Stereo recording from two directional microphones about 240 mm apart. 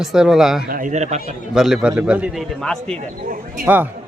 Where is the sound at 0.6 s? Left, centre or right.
Right.